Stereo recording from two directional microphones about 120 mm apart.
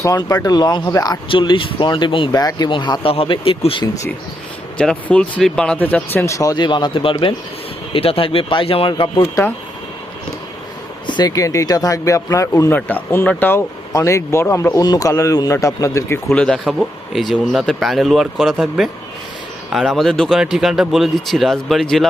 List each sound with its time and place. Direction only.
0.0 s speech: 30° left (ahead or behind)
1.3 s speech: 45° left (ahead or behind)
4.8 s speech: 10° left (ahead or behind)
6.1 s speech: 25° left (ahead or behind); by 9.3 s 45° left (ahead or behind)
11.0 s speech: 30° left (ahead or behind)
12.7 s speech: 15° left (ahead or behind)